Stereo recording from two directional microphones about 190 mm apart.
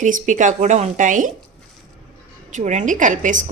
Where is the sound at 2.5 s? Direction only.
40° right (ahead or behind).